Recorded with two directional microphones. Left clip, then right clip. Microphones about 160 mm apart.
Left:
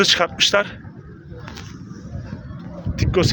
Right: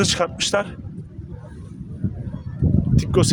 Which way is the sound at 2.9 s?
25° right (ahead or behind).